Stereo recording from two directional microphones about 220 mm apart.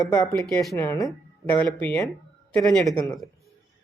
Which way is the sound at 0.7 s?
10° left (ahead or behind).